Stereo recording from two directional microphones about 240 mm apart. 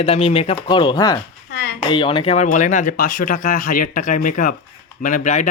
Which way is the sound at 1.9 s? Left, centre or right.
Left.